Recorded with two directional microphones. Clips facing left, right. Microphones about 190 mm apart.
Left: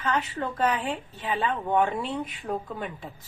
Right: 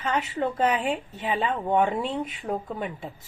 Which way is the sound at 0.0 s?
20° right (ahead or behind).